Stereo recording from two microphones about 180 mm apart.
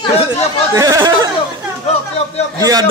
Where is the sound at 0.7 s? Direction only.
20° right (ahead or behind).